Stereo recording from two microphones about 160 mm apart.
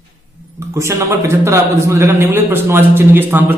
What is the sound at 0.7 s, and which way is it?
A man's voice, 15° right (ahead or behind).